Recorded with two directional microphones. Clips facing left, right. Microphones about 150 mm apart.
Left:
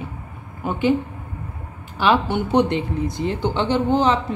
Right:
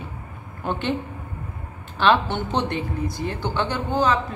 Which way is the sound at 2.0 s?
10° left (ahead or behind).